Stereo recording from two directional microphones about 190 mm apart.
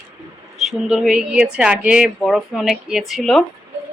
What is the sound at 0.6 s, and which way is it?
Speech, centre (ahead or behind).